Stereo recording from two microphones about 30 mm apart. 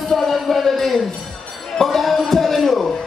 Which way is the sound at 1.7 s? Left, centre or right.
Centre.